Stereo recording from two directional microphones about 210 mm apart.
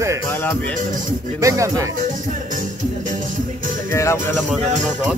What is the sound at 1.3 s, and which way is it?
Speech, 15° right (ahead or behind).